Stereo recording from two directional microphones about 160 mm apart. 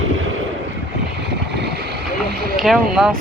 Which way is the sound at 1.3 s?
90° right.